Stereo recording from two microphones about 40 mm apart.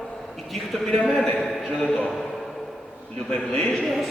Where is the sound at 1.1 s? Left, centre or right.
Centre.